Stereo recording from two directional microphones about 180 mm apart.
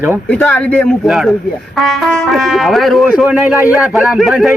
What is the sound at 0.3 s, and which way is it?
Speech, 10° left (ahead or behind).